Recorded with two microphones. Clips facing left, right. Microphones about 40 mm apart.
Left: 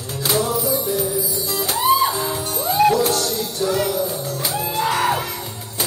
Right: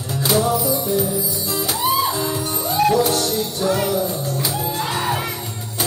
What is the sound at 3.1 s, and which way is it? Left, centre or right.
Music, right.